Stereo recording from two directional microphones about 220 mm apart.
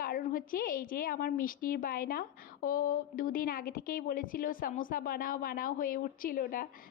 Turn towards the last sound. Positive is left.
turn(degrees=40)  # may be behind; listen again after turning